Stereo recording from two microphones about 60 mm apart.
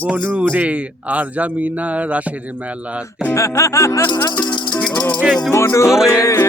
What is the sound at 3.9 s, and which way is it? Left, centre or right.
Speech, left.